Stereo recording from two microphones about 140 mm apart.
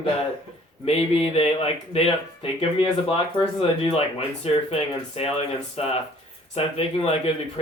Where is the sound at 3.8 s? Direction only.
45° left (ahead or behind).